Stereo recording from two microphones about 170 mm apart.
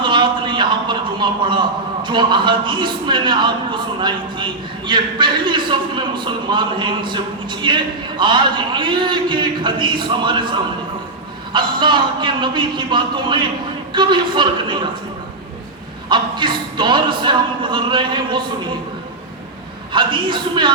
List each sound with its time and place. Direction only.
0.0 s a sound: 30° right (ahead or behind)
2.0 s a man's voice: 25° right (ahead or behind)
11.5 s a man's voice: 30° right (ahead or behind)
16.0 s a man's voice: 25° right (ahead or behind)
19.9 s a man's voice: 30° right (ahead or behind)